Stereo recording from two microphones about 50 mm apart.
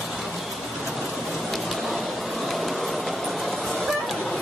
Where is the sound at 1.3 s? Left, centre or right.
Centre.